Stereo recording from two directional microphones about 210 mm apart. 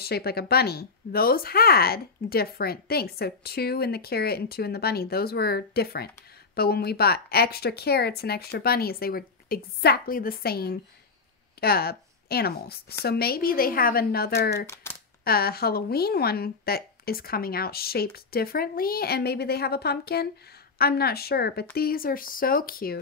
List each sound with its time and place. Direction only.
0.0 s speech: 50° left (ahead or behind)
14.7 s speech: 10° left (ahead or behind)
15.2 s speech: 45° left (ahead or behind)